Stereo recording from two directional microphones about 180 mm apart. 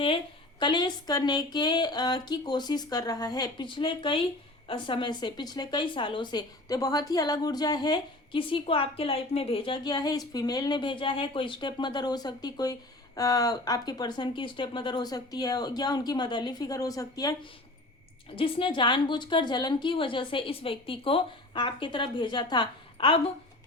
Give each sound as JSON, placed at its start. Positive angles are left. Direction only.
{"t": 0.6, "sound": "speech", "side_deg": 25}
{"t": 18.3, "sound": "speech", "side_deg": 30}